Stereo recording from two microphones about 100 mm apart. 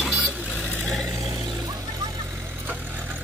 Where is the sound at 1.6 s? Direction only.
35° right (ahead or behind).